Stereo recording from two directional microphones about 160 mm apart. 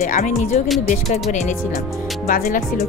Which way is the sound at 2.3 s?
60° left (ahead or behind).